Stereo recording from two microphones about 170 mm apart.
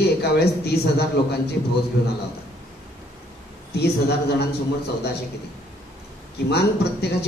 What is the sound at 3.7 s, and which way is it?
A man's voice, 75° left (ahead or behind).